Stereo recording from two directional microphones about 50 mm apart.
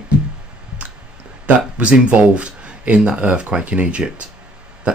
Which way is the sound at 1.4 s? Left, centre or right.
Right.